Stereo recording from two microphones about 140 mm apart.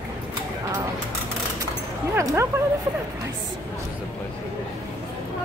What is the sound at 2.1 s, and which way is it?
Speech, 20° right (ahead or behind).